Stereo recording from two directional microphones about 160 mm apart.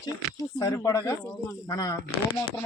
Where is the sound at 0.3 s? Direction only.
20° left (ahead or behind).